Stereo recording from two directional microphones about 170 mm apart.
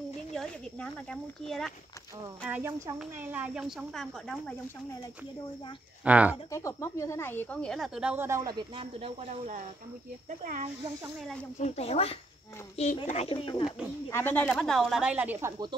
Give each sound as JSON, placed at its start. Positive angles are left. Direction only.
{"t": 0.3, "sound": "a woman's voice", "side_deg": 5}
{"t": 2.4, "sound": "a woman's voice", "side_deg": -10}
{"t": 6.0, "sound": "speech", "side_deg": -10}
{"t": 6.5, "sound": "speech", "side_deg": 20}
{"t": 8.5, "sound": "speech", "side_deg": -30}
{"t": 11.6, "sound": "speech", "side_deg": 40}
{"t": 14.1, "sound": "a woman's voice", "side_deg": 10}